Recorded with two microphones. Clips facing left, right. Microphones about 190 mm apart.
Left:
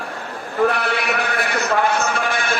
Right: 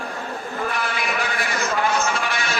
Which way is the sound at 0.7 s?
65° left (ahead or behind).